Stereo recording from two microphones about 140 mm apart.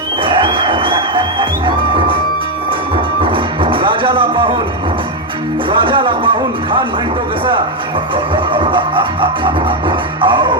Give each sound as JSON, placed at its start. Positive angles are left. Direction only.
{"t": 0.2, "sound": "music", "side_deg": -35}
{"t": 5.8, "sound": "music", "side_deg": -35}
{"t": 8.1, "sound": "music", "side_deg": -35}